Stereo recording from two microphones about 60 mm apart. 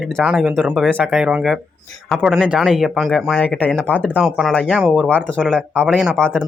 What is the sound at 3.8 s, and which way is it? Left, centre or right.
Speech, left.